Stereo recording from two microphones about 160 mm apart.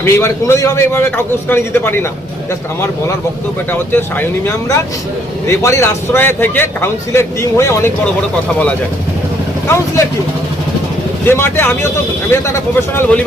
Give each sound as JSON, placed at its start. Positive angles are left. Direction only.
{"t": 0.0, "sound": "a man's voice", "side_deg": 15}
{"t": 3.7, "sound": "a man's voice", "side_deg": 15}
{"t": 9.6, "sound": "speech", "side_deg": 15}
{"t": 11.3, "sound": "a man's voice", "side_deg": 15}